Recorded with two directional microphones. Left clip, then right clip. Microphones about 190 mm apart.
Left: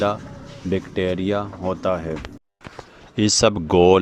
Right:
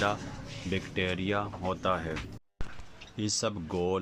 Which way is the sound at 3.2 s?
50° left (ahead or behind).